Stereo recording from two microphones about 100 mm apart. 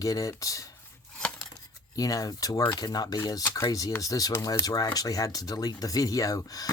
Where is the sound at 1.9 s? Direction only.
35° left (ahead or behind).